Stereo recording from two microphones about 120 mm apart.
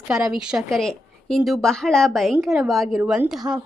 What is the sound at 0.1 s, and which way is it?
A woman's voice, 5° right (ahead or behind).